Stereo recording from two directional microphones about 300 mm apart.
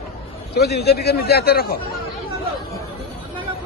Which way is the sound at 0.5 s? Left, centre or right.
Left.